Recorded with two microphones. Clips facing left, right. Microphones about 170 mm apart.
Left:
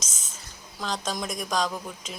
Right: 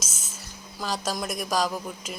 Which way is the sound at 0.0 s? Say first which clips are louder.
Right 2 dB; 5° right (ahead or behind).